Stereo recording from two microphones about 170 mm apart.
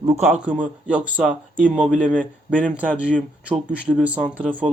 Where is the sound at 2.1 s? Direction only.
5° left (ahead or behind).